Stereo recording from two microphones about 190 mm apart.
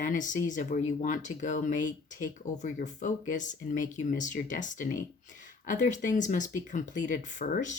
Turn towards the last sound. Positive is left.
turn(degrees=40)  # may be behind; listen again after turning